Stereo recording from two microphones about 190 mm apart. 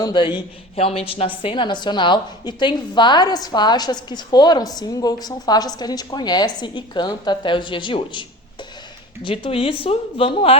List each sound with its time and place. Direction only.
0.0 s a woman's voice: 25° left (ahead or behind)
9.2 s a woman's voice: 30° left (ahead or behind)